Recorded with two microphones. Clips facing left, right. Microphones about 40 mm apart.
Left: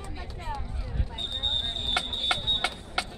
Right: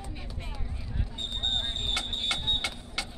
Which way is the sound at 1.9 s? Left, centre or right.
Centre.